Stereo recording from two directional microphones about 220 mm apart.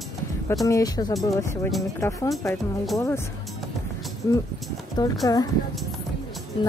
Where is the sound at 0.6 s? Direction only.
15° left (ahead or behind).